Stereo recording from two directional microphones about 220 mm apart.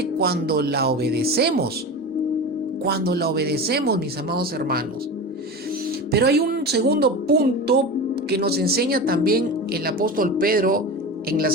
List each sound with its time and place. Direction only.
0.0 s speech: 45° right (ahead or behind)
2.8 s speech: 45° right (ahead or behind)
6.1 s speech: 45° right (ahead or behind)